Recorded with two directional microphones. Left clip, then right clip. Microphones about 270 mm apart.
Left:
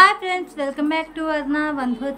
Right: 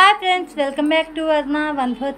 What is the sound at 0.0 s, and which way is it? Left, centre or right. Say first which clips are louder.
A woman's voice: right 1 dB; centre.